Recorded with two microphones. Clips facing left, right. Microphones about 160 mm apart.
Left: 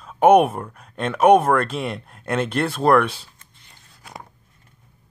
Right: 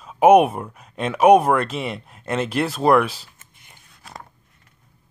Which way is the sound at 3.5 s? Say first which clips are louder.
Right 1 dB; 15° right (ahead or behind).